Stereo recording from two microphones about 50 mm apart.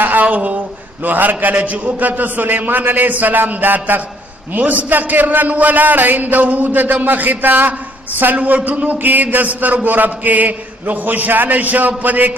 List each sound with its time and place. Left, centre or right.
0.0 s a woman's voice: right